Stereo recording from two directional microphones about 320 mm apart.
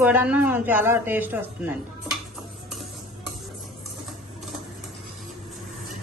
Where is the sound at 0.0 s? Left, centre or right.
Centre.